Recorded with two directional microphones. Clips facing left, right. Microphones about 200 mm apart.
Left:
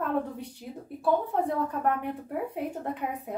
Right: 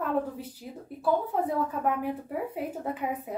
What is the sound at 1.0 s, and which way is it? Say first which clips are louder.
A woman's voice: left 1 dB; centre (ahead or behind).